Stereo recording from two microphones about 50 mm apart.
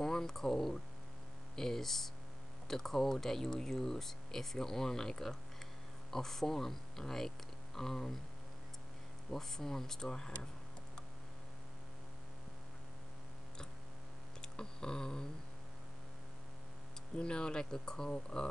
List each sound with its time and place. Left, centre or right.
0.0 s speech: centre
9.3 s speech: centre
14.4 s a sound: centre
17.2 s speech: centre